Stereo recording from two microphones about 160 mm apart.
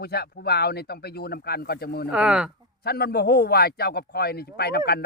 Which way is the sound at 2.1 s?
5° right (ahead or behind).